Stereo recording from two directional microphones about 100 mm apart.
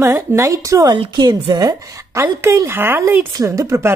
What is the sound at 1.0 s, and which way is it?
Speech, 50° right (ahead or behind).